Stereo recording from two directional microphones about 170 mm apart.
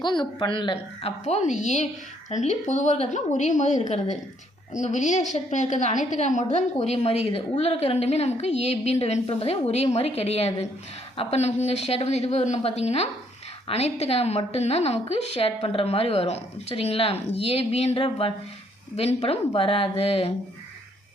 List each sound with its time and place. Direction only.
0.0 s a woman's voice: 25° left (ahead or behind)